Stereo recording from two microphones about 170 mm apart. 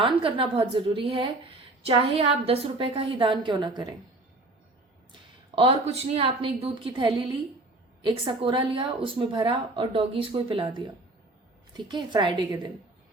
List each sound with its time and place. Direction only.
0.0 s a woman's voice: 30° right (ahead or behind)
5.5 s a woman's voice: 35° right (ahead or behind)